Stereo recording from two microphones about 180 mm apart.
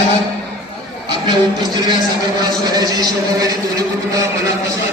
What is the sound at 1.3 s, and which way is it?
A man's voice, 25° right (ahead or behind).